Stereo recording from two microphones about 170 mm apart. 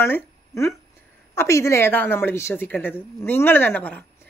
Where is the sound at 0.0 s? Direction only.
15° left (ahead or behind).